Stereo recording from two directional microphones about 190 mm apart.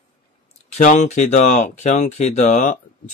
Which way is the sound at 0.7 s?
40° left (ahead or behind).